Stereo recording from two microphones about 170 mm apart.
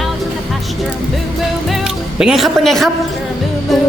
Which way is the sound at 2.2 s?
Centre (ahead or behind).